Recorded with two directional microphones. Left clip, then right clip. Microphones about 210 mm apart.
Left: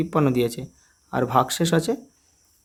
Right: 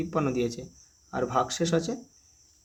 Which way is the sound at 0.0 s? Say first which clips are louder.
Left 6 dB; 40° left (ahead or behind).